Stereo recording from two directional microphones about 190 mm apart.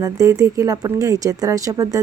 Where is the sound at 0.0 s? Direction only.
20° right (ahead or behind).